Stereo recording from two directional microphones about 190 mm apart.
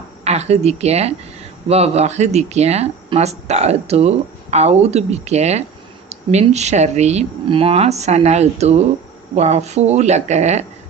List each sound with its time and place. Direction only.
0.3 s speech: 35° right (ahead or behind)